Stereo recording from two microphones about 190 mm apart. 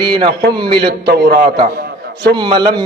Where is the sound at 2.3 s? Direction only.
25° right (ahead or behind).